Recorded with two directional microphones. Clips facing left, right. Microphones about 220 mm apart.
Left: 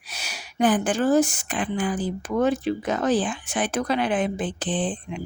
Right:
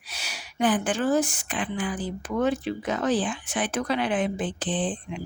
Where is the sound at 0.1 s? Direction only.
45° left (ahead or behind).